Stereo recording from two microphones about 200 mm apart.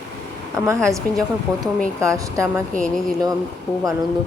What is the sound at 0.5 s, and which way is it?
Speech, 15° right (ahead or behind).